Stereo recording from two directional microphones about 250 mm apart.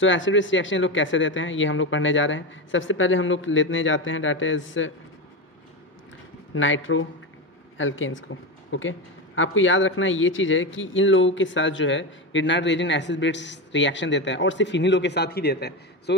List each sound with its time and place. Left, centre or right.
0.0 s speech: left
6.5 s speech: left